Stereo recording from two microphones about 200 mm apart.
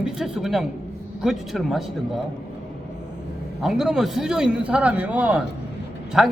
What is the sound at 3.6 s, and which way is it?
A man's voice, centre (ahead or behind).